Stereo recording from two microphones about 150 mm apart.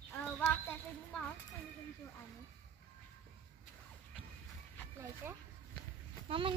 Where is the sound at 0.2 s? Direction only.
10° left (ahead or behind).